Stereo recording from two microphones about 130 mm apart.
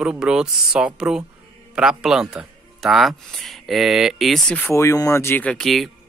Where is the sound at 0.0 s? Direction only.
5° right (ahead or behind).